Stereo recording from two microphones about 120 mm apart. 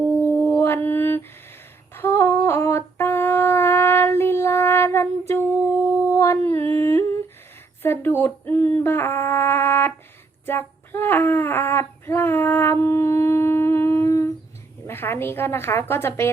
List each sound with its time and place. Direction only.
0.3 s mantra: 15° left (ahead or behind)
1.9 s female singing: 20° left (ahead or behind)
5.8 s a sound: 25° left (ahead or behind)
6.5 s humming: 25° left (ahead or behind)
7.8 s music: 20° left (ahead or behind)
10.4 s a sound: 20° left (ahead or behind)